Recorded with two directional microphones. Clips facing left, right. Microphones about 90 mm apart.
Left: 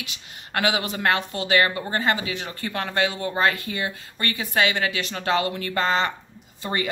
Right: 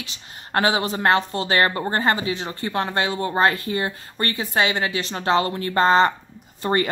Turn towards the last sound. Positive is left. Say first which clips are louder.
# right 6 dB
turn(degrees=-45)  # may be behind; listen again after turning